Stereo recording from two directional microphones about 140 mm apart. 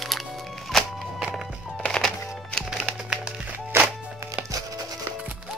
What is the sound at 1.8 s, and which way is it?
Music, 5° left (ahead or behind).